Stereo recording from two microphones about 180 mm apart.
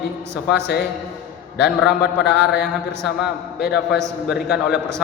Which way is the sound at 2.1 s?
65° left (ahead or behind).